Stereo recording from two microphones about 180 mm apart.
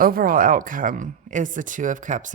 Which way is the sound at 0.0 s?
55° right (ahead or behind).